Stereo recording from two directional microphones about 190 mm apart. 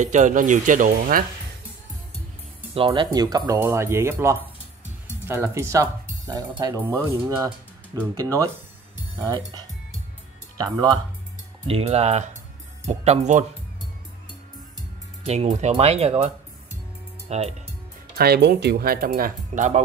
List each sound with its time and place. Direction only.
0.0 s speech: 40° right (ahead or behind)
2.7 s speech: 30° right (ahead or behind)
10.6 s speech: 20° right (ahead or behind)
11.6 s speech: 30° right (ahead or behind)
15.2 s speech: 35° right (ahead or behind)
18.1 s speech: 55° right (ahead or behind)